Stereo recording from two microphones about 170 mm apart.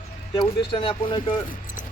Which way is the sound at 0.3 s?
30° left (ahead or behind).